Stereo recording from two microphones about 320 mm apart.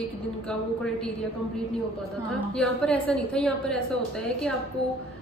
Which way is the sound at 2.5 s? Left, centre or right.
Centre.